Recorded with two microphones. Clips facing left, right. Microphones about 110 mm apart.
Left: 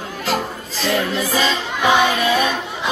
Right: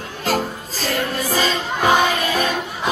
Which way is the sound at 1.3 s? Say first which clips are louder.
Left 1 dB; 45° right (ahead or behind).